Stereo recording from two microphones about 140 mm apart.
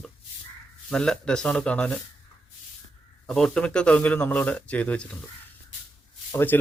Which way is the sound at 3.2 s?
5° left (ahead or behind).